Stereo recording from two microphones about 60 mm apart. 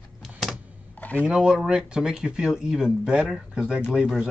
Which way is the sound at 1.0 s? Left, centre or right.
Left.